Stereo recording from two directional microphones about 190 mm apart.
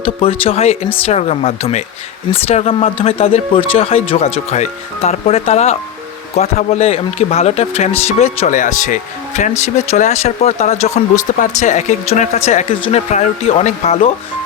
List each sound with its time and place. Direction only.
0.0 s speech: 30° left (ahead or behind)